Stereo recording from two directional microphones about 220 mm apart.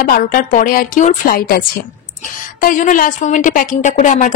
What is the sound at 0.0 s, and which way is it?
A woman's voice, 40° left (ahead or behind).